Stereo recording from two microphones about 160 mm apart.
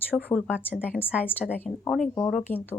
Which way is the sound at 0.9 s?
10° left (ahead or behind).